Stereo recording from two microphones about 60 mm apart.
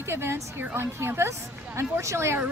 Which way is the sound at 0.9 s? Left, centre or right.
Right.